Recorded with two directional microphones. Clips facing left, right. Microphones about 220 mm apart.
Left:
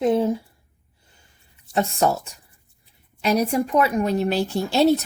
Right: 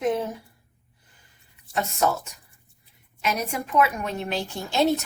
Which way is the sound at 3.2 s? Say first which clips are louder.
Left 8 dB; 35° left (ahead or behind).